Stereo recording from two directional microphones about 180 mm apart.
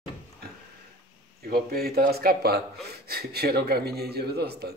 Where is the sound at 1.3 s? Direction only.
55° right (ahead or behind).